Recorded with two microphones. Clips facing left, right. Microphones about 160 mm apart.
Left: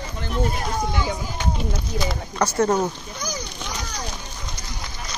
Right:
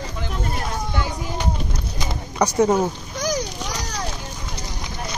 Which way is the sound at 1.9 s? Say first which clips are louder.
Right 2 dB; 15° right (ahead or behind).